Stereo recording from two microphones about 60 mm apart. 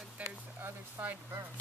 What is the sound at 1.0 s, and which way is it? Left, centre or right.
Speech, right.